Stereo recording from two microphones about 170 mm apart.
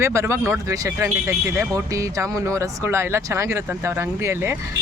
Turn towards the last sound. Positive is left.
turn(degrees=-15)  # may be behind; listen again after turning